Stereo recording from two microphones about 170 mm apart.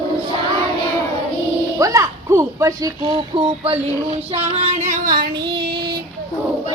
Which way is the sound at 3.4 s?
30° right (ahead or behind).